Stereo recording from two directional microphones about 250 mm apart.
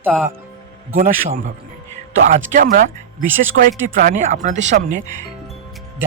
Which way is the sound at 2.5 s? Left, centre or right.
Right.